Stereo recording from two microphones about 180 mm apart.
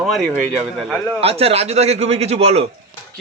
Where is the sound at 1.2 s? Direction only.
35° right (ahead or behind).